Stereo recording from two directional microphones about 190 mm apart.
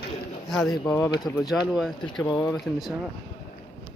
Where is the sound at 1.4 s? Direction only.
Centre (ahead or behind).